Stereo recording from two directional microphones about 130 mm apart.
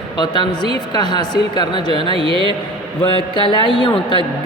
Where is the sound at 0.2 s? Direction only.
35° left (ahead or behind).